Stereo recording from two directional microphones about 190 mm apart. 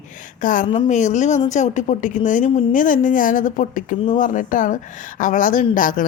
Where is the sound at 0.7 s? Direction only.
35° left (ahead or behind).